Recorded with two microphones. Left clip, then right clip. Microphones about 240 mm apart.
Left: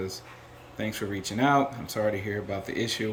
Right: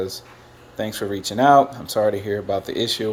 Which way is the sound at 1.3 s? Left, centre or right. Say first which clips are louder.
Right 10 dB; centre.